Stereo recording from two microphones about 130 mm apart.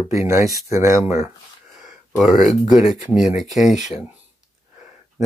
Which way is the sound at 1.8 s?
Centre (ahead or behind).